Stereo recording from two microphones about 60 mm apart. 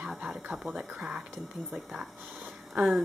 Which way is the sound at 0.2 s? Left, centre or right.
Centre.